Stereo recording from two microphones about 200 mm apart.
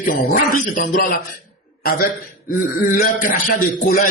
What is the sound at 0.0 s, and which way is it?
A man's voice, 40° left (ahead or behind).